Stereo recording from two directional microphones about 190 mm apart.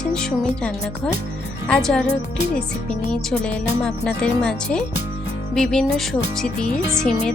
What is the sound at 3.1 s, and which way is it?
Speech, 5° left (ahead or behind).